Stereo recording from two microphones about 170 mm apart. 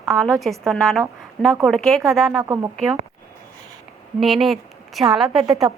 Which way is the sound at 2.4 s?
20° right (ahead or behind).